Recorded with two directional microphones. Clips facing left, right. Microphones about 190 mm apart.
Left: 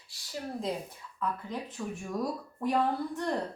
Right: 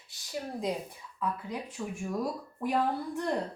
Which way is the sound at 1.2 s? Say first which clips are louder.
Even; 10° right (ahead or behind).